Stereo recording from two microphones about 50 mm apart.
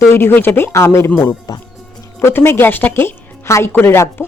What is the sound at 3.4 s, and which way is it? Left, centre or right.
Speech, left.